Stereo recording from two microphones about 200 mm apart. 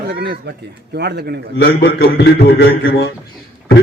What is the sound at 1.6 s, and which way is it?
A man's voice, 55° left (ahead or behind).